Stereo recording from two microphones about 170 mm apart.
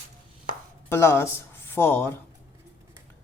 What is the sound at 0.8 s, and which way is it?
Speech, 15° left (ahead or behind).